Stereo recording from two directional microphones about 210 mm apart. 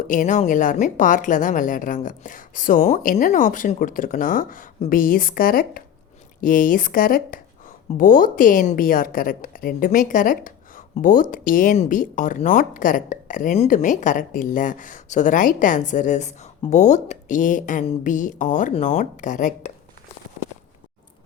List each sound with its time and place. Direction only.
0.1 s a woman's voice: 40° left (ahead or behind)